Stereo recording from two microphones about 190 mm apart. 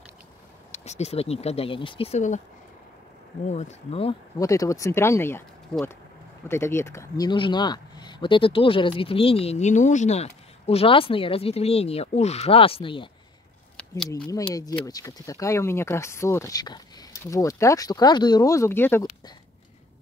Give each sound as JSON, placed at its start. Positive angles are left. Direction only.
{"t": 0.7, "sound": "speech", "side_deg": 35}
{"t": 3.4, "sound": "speech", "side_deg": 35}
{"t": 4.4, "sound": "speech", "side_deg": 15}
{"t": 6.5, "sound": "speech", "side_deg": 15}
{"t": 14.5, "sound": "speech", "side_deg": 20}